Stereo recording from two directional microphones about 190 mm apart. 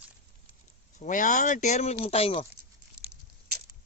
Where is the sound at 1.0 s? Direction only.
40° left (ahead or behind).